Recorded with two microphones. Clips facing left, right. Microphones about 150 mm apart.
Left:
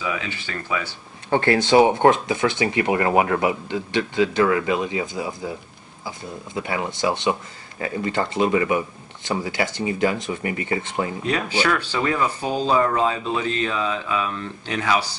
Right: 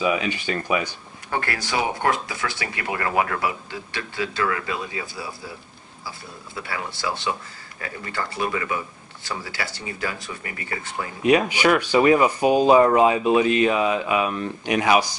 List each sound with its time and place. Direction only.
0.0 s speech: 20° right (ahead or behind)
1.3 s speech: 25° left (ahead or behind)
11.2 s speech: 15° right (ahead or behind)